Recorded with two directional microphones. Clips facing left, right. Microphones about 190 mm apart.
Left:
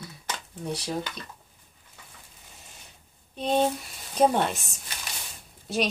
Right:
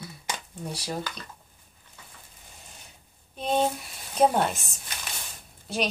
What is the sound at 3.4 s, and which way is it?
Speech, 5° right (ahead or behind).